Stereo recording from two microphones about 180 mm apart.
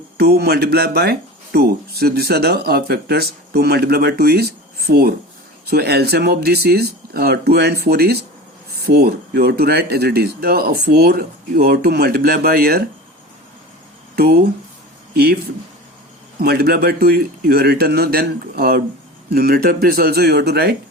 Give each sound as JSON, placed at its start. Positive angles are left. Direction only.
{"t": 0.2, "sound": "speech", "side_deg": -60}
{"t": 15.1, "sound": "speech", "side_deg": -60}
{"t": 16.4, "sound": "speech", "side_deg": -60}